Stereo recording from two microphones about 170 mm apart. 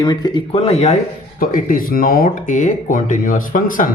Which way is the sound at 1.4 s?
55° left (ahead or behind).